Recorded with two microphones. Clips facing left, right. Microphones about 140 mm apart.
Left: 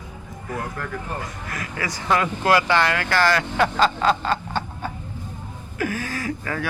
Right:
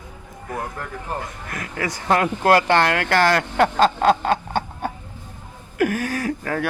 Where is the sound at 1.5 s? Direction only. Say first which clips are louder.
Right 3 dB; 55° right (ahead or behind).